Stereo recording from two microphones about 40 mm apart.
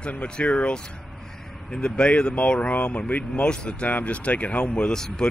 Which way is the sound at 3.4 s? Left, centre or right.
Left.